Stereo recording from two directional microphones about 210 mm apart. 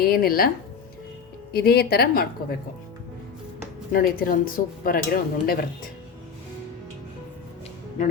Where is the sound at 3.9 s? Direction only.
45° left (ahead or behind).